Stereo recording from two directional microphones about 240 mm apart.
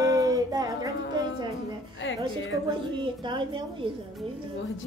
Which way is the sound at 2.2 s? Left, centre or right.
Centre.